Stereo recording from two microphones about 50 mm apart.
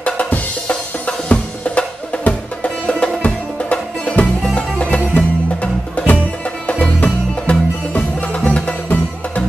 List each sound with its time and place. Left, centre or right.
0.0 s drum: left
3.7 s music: left